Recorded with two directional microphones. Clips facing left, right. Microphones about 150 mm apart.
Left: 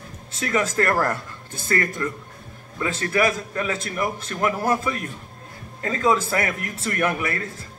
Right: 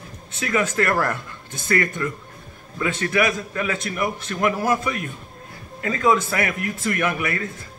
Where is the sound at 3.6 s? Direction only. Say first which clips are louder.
Right 1 dB; 35° left (ahead or behind).